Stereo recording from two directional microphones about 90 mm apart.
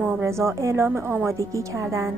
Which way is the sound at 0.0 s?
30° right (ahead or behind).